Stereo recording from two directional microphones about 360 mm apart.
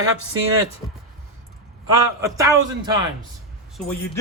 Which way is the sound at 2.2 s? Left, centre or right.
Centre.